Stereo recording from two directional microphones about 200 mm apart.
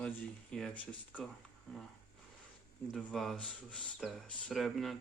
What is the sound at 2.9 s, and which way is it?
Speech, centre (ahead or behind).